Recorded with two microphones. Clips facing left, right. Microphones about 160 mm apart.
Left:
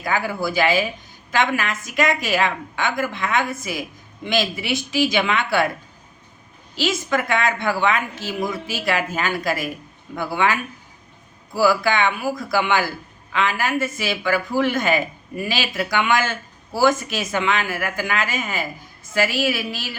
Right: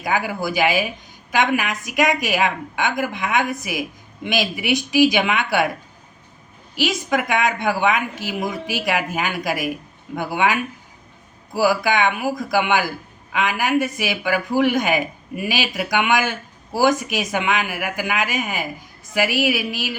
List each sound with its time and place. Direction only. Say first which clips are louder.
0.0 s a woman's voice: even; 15° right (ahead or behind)
6.7 s a woman's voice: right 1 dB; 15° right (ahead or behind)